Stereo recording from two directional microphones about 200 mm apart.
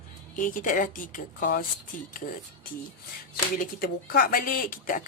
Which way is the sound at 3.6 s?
45° left (ahead or behind).